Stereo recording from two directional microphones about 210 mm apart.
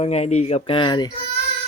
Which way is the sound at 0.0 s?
30° left (ahead or behind).